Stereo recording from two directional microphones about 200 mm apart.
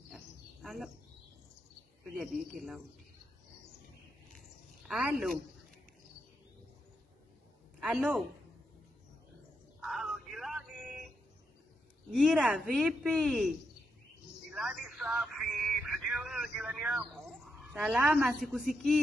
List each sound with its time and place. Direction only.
0.1 s bird: centre (ahead or behind)
4.8 s a woman's voice: centre (ahead or behind)
7.8 s speech: centre (ahead or behind)
9.8 s a sound: centre (ahead or behind)
12.1 s a woman's voice: 5° right (ahead or behind)
14.5 s a sound: centre (ahead or behind)